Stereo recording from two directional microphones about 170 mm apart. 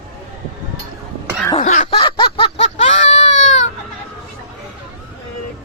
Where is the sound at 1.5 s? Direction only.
45° left (ahead or behind).